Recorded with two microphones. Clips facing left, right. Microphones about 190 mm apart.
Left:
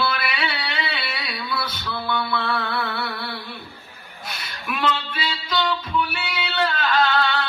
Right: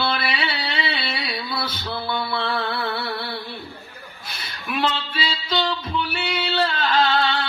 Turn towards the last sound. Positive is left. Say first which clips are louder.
# right 1 dB
turn(degrees=-30)  # may be behind; listen again after turning